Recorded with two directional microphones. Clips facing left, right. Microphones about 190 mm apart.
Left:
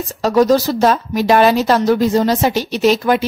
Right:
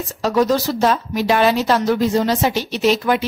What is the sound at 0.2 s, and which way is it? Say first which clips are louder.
Speech: left 4 dB; 40° left (ahead or behind).